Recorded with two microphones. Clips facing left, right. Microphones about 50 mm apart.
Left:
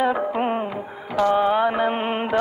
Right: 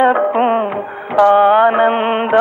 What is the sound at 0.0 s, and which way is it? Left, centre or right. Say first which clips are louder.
Music: right 9 dB; right.